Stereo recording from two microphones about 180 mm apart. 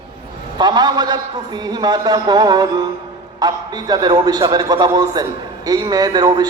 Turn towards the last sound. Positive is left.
turn(degrees=-20)  # may be behind; listen again after turning